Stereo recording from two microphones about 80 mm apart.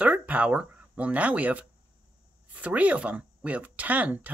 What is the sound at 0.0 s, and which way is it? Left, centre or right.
Speech, centre.